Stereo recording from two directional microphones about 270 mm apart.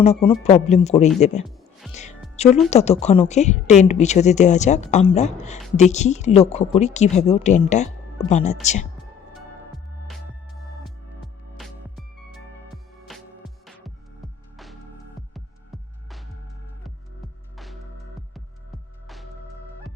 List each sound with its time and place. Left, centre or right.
0.0 s a woman's voice: left
10.1 s music: centre
19.0 s music: centre